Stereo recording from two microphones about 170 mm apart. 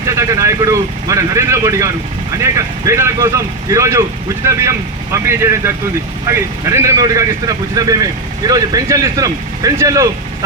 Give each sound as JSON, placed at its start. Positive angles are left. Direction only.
{"t": 0.2, "sound": "speech", "side_deg": -20}
{"t": 5.1, "sound": "speech", "side_deg": -15}